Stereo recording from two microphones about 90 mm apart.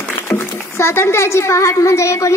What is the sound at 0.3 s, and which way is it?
A child's voice, 30° left (ahead or behind).